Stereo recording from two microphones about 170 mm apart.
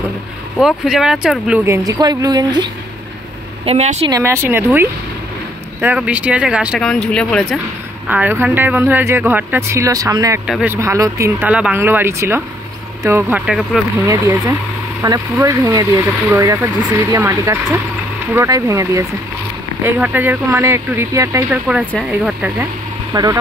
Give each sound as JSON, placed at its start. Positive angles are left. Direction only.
{"t": 0.6, "sound": "speech", "side_deg": 0}
{"t": 1.7, "sound": "speech", "side_deg": -20}
{"t": 3.6, "sound": "a woman's voice", "side_deg": -40}
{"t": 4.1, "sound": "speech", "side_deg": -15}
{"t": 8.1, "sound": "speech", "side_deg": -10}
{"t": 10.4, "sound": "speech", "side_deg": -5}
{"t": 15.0, "sound": "speech", "side_deg": -15}
{"t": 23.1, "sound": "speech", "side_deg": -25}